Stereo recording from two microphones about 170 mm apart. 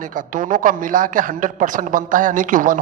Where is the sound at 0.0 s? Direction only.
50° right (ahead or behind).